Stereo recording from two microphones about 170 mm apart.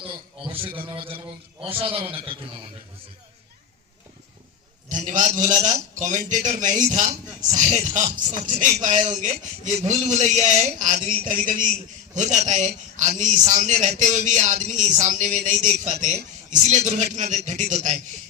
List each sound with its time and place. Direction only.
0.0 s a man's voice: 30° right (ahead or behind)
1.7 s a man's voice: 30° right (ahead or behind)
4.9 s a man's voice: 50° right (ahead or behind)